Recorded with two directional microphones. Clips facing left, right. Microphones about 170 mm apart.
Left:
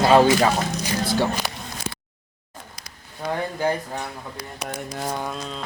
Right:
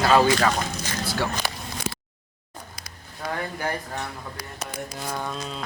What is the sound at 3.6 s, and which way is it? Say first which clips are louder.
Speech: left 5 dB; 20° left (ahead or behind).